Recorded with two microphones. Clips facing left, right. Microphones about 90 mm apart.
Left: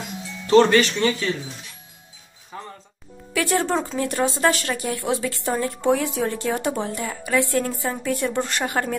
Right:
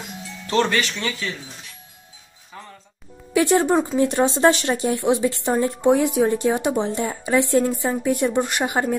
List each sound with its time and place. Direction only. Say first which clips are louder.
0.5 s speech: left 6 dB; 30° left (ahead or behind)
2.5 s music: left 4 dB; 25° left (ahead or behind)
3.3 s speech: right 5 dB; 20° right (ahead or behind)